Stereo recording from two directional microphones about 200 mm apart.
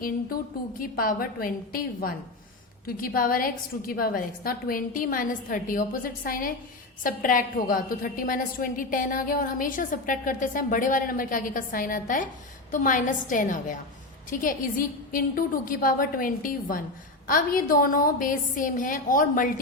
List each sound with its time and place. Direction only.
0.8 s a woman's voice: 45° left (ahead or behind)